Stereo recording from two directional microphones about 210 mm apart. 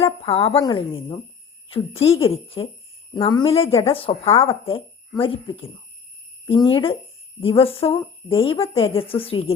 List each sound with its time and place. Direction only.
0.0 s speech: 25° left (ahead or behind)